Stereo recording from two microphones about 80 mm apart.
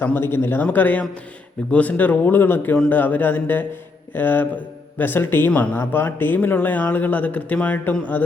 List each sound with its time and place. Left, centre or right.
0.0 s speech: left